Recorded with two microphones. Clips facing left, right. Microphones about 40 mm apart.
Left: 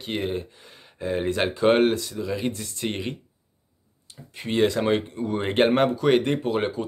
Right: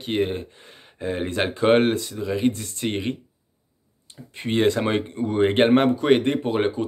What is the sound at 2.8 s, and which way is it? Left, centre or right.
Speech, right.